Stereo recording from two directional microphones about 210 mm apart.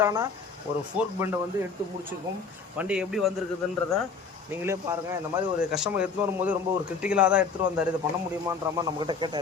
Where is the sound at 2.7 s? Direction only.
5° right (ahead or behind).